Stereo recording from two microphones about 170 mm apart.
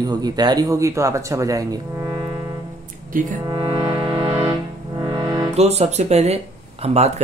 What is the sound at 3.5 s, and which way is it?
Music, 25° right (ahead or behind).